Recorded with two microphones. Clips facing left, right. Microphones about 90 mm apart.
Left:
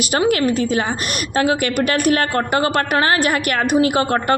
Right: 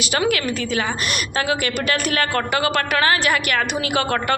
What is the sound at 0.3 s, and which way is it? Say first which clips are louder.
A woman's voice: left 5 dB; 45° left (ahead or behind).